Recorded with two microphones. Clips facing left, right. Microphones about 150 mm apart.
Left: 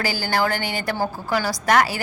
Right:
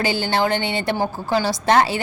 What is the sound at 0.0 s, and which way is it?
A woman's voice, 25° right (ahead or behind).